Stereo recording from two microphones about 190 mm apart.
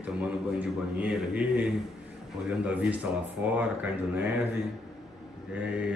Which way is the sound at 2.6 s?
5° right (ahead or behind).